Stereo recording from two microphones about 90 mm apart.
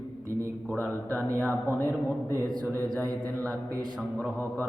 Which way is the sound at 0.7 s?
20° left (ahead or behind).